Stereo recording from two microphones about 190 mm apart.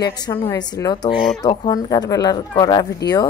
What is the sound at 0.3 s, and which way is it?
A woman's voice, 20° left (ahead or behind).